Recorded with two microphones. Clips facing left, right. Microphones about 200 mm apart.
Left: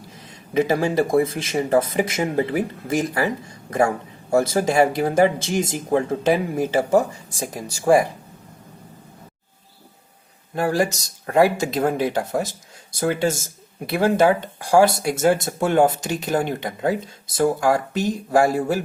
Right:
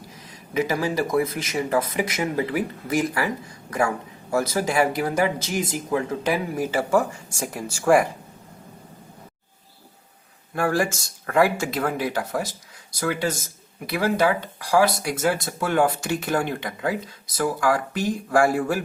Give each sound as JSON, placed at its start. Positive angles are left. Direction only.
{"t": 0.2, "sound": "speech", "side_deg": 25}
{"t": 10.5, "sound": "speech", "side_deg": 20}